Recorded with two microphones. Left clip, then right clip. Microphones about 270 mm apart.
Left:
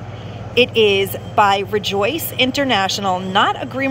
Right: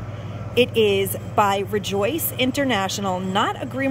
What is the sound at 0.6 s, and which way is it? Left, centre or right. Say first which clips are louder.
Speech: left 4 dB; centre.